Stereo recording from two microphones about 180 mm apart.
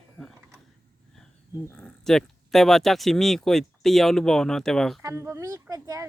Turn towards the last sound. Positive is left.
turn(degrees=-20)  # may be behind; listen again after turning